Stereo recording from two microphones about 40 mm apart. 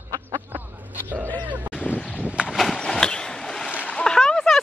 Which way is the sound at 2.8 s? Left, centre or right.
Centre.